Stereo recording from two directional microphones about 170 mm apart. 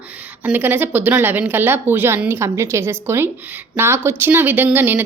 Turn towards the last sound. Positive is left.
turn(degrees=-10)  # may be behind; listen again after turning